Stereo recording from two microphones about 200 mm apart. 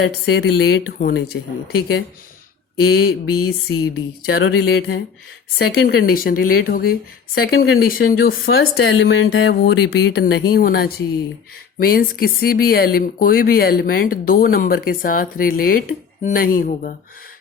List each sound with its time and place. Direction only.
0.0 s speech: 55° left (ahead or behind)
8.7 s a woman's voice: 90° left
9.0 s a sound: 75° left (ahead or behind)
9.5 s speech: 55° left (ahead or behind)